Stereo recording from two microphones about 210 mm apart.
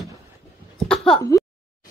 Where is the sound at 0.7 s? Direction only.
5° left (ahead or behind).